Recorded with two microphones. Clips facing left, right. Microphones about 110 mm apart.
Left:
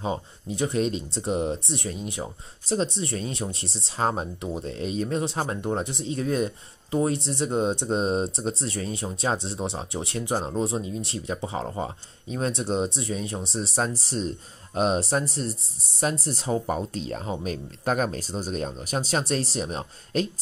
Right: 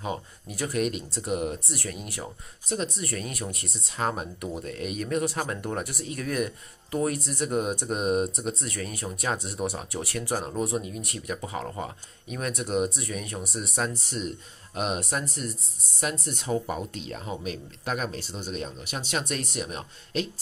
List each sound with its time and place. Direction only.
0.0 s speech: 25° left (ahead or behind)